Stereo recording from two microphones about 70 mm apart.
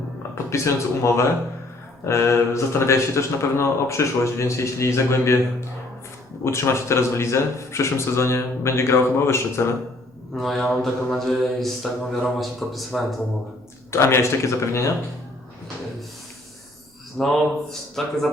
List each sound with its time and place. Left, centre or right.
0.5 s a man's voice: left
10.3 s a man's voice: centre
13.9 s speech: left
17.2 s a man's voice: centre